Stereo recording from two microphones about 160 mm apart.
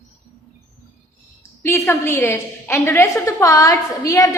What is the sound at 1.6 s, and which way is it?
A man's voice, 15° left (ahead or behind).